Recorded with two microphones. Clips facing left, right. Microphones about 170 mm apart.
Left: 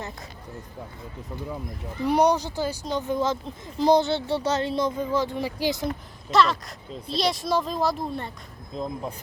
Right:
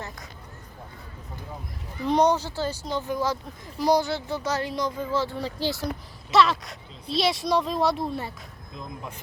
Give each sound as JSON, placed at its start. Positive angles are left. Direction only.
{"t": 2.0, "sound": "speech", "side_deg": 10}
{"t": 6.3, "sound": "speech", "side_deg": 0}
{"t": 8.7, "sound": "speech", "side_deg": 35}